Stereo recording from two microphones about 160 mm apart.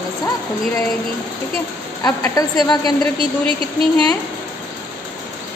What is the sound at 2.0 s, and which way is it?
Speech, 20° left (ahead or behind).